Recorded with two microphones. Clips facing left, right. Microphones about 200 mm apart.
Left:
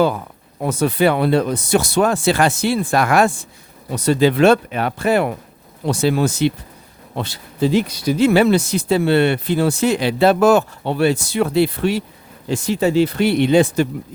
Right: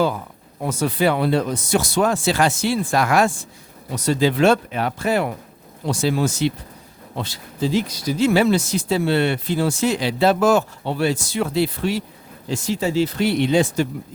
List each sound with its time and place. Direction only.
0.6 s speech: 60° left (ahead or behind)